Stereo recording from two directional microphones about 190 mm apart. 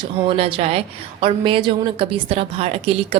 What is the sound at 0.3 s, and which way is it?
A woman's voice, 30° right (ahead or behind).